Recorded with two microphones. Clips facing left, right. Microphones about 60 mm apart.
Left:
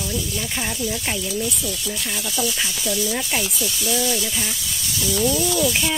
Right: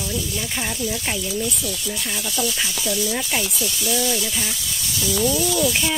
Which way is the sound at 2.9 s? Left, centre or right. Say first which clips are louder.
Even; centre.